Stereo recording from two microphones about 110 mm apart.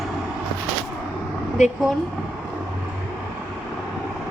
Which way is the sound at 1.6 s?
90° left.